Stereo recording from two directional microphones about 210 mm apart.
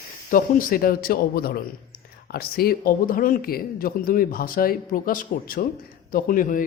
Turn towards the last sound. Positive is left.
turn(degrees=40)  # may be behind; listen again after turning